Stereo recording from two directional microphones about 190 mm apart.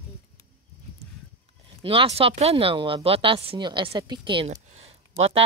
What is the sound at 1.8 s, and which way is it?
Speech, 30° right (ahead or behind).